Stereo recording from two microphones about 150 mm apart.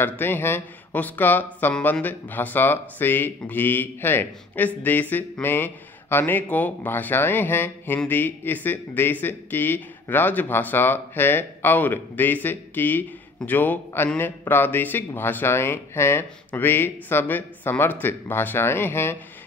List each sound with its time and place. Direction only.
0.0 s speech: 15° left (ahead or behind)